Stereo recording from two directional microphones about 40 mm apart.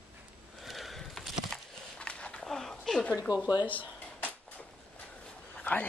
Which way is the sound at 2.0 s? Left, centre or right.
Left.